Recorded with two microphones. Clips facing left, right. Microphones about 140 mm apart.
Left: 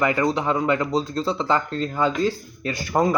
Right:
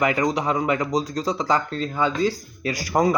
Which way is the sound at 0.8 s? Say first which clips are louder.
Even; 10° right (ahead or behind).